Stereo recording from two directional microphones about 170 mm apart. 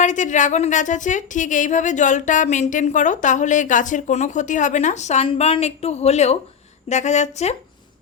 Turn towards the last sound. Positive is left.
turn(degrees=40)  # may be behind; listen again after turning